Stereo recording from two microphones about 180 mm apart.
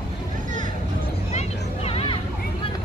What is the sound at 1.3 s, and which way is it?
Vehicle, 35° left (ahead or behind).